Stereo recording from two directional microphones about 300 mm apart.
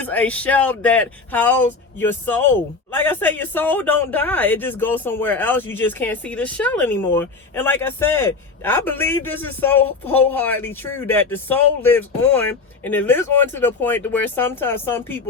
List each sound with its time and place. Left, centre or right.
0.0 s speech: centre